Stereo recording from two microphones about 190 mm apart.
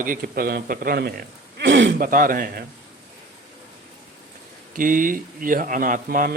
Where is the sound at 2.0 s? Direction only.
50° right (ahead or behind).